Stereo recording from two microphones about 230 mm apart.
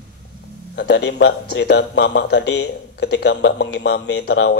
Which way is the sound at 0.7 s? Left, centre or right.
Left.